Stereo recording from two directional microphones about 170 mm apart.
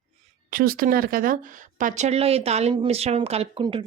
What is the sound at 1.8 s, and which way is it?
Speech, 40° right (ahead or behind).